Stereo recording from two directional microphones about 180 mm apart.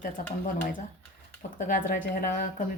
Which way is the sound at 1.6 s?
45° left (ahead or behind).